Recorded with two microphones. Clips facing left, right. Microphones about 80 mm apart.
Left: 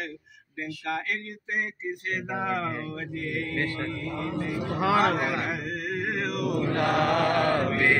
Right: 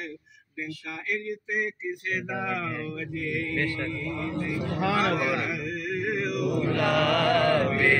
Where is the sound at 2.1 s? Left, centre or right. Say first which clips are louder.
Left 2 dB; left.